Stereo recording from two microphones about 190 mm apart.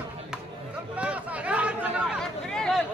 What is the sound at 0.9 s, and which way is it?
Chatter, 5° right (ahead or behind).